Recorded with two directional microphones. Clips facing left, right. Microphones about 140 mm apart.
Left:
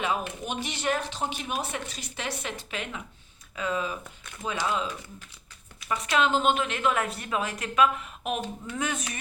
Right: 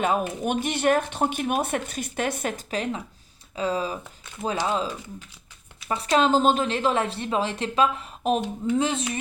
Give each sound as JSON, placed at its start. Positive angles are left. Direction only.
{"t": 0.0, "sound": "a woman's voice", "side_deg": -45}
{"t": 5.9, "sound": "a woman's voice", "side_deg": -35}